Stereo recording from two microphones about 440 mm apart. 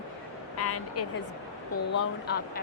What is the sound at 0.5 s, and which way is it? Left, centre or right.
Speech, left.